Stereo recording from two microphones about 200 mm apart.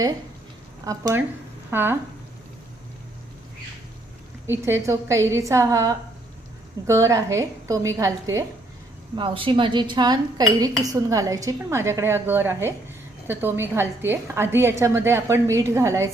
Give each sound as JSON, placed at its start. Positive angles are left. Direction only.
{"t": 0.9, "sound": "speech", "side_deg": -15}
{"t": 4.4, "sound": "speech", "side_deg": -10}